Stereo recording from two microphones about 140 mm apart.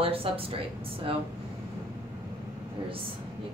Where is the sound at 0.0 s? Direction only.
40° right (ahead or behind).